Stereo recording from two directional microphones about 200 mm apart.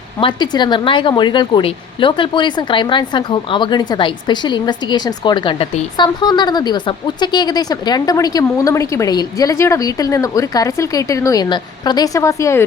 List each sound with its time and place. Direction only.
0.2 s a woman's voice: 25° left (ahead or behind)